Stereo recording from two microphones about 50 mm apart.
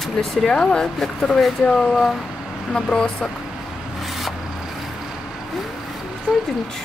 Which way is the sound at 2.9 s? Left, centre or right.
Centre.